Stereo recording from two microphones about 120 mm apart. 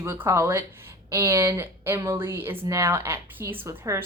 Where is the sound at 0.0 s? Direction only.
20° right (ahead or behind).